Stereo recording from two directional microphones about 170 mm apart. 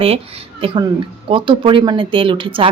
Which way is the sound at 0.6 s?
30° right (ahead or behind).